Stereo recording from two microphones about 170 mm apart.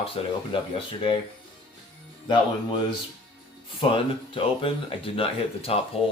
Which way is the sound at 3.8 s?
30° left (ahead or behind).